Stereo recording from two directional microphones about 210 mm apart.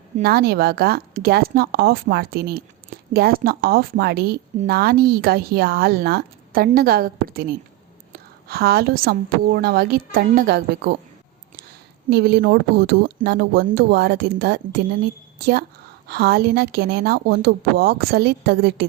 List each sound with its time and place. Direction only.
0.2 s a woman's voice: 45° right (ahead or behind)
12.1 s a woman's voice: 50° right (ahead or behind)
16.0 s a woman's voice: 50° right (ahead or behind)